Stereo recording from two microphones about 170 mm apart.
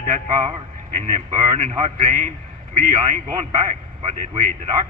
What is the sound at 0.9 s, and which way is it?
A man's voice, 40° right (ahead or behind).